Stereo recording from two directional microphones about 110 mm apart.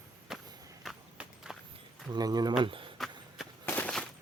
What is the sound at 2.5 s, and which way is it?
Speech, 50° right (ahead or behind).